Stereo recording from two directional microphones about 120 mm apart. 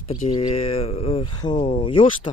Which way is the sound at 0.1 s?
50° left (ahead or behind).